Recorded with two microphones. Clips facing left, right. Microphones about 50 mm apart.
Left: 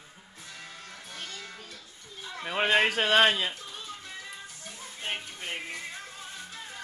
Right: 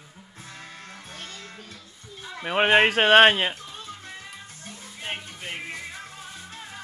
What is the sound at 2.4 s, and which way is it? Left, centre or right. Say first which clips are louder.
Speech: right 6 dB; right.